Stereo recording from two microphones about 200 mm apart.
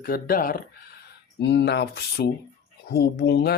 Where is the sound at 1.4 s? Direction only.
60° left (ahead or behind).